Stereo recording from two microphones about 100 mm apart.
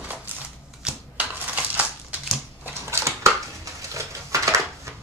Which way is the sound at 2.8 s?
30° right (ahead or behind).